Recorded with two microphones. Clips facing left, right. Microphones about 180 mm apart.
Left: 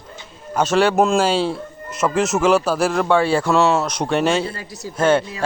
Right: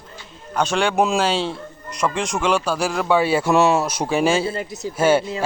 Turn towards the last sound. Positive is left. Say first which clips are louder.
# even
turn(degrees=-5)  # may be behind; listen again after turning